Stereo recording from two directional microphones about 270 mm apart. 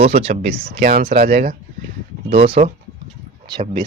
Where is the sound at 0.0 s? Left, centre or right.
Right.